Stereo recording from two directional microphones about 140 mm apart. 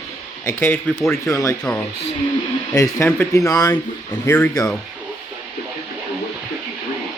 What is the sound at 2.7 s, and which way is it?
Speech, 20° left (ahead or behind).